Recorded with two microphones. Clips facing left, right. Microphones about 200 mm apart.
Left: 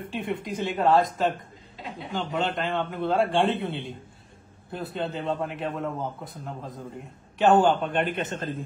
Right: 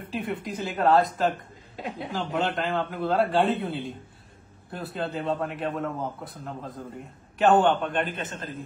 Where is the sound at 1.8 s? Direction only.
55° right (ahead or behind).